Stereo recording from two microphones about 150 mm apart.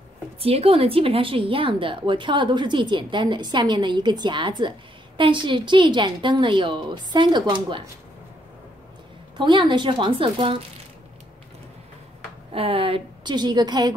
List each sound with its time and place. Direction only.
0.4 s a woman's voice: 40° right (ahead or behind)
9.4 s a woman's voice: 30° right (ahead or behind)
12.5 s a woman's voice: 40° right (ahead or behind)